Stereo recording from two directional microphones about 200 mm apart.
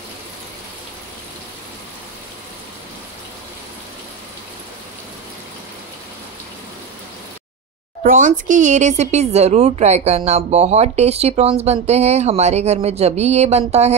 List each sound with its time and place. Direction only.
8.0 s a child's voice: 40° right (ahead or behind)